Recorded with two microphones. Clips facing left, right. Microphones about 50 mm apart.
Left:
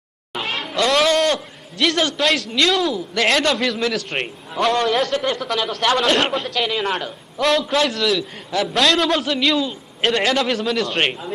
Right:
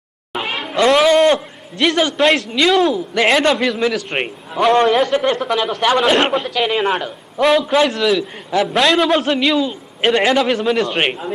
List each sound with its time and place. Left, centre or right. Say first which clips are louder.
0.3 s music: right 3 dB; centre
0.9 s a sound: right 5 dB; centre
1.8 s a man's voice: right 4 dB; centre
4.7 s speech: right 7 dB; right
4.9 s speech: right 5 dB; centre
5.5 s a man's voice: right 3 dB; centre